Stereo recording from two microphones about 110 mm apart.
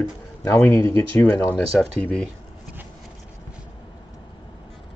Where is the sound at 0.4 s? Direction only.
20° left (ahead or behind).